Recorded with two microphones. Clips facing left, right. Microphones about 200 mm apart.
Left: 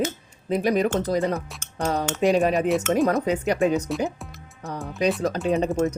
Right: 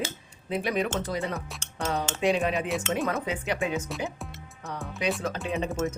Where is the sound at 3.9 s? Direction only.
Centre (ahead or behind).